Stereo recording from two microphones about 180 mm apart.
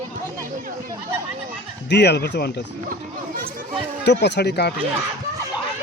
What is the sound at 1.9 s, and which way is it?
Speech, 70° left (ahead or behind).